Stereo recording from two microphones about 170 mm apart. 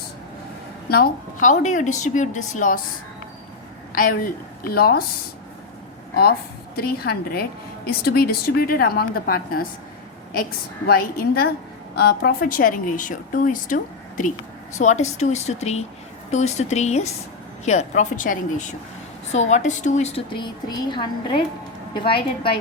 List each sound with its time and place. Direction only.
0.9 s speech: 65° left (ahead or behind)
3.9 s a woman's voice: 55° left (ahead or behind)
6.7 s a woman's voice: 65° left (ahead or behind)
10.8 s a woman's voice: 65° left (ahead or behind)
14.8 s a woman's voice: 45° left (ahead or behind)